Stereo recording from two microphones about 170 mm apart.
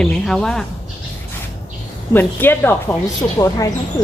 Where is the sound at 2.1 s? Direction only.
10° left (ahead or behind).